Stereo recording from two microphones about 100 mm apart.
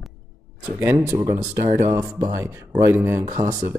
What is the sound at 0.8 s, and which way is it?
Speech, 25° right (ahead or behind).